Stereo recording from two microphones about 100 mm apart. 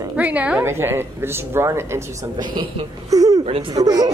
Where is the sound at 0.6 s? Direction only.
25° right (ahead or behind).